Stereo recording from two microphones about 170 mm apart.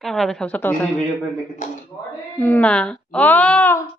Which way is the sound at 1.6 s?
45° left (ahead or behind).